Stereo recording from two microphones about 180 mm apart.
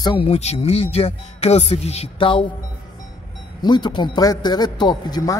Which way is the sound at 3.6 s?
25° left (ahead or behind).